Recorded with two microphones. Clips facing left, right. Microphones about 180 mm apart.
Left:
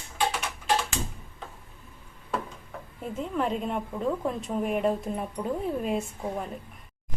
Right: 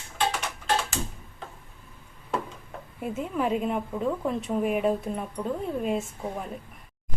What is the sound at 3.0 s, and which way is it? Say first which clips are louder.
A woman's voice: right 1 dB; 5° right (ahead or behind).